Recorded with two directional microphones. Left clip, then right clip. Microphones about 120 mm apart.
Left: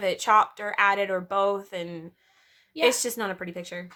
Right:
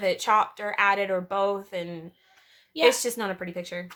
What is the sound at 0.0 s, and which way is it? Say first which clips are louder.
Speech: left 1 dB; 40° left (ahead or behind).